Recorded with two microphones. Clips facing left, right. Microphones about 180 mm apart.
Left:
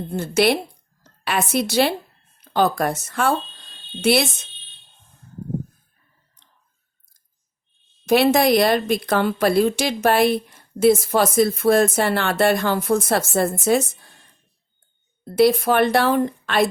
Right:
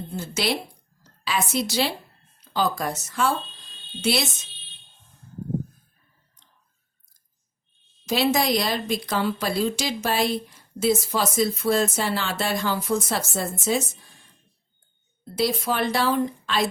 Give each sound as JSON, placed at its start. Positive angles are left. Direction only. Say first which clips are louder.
{"t": 0.1, "sound": "a woman's voice", "louder": "left 8 dB", "side_deg": 55}
{"t": 8.0, "sound": "a woman's voice", "louder": "left 6 dB", "side_deg": 60}
{"t": 15.2, "sound": "a woman's voice", "louder": "left 9 dB", "side_deg": 55}